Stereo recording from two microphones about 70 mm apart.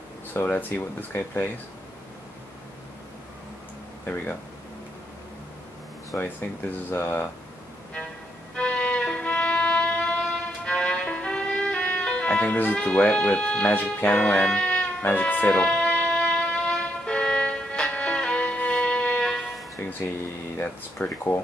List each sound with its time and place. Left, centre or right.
0.5 s speech: left
4.0 s speech: left
6.1 s speech: left
8.5 s music: centre
15.6 s music: centre
19.8 s speech: left